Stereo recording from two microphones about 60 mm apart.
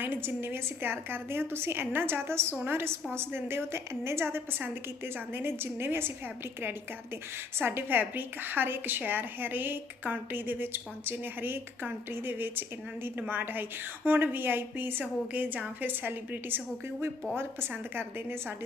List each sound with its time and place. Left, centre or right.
0.0 s a woman's voice: right
7.6 s a woman's voice: right